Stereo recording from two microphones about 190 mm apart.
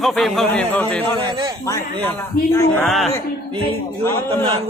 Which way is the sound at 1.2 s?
25° right (ahead or behind).